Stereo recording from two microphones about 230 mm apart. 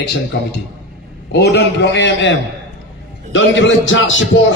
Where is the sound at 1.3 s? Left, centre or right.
Left.